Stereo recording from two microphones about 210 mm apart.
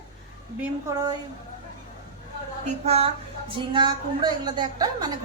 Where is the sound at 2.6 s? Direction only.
30° right (ahead or behind).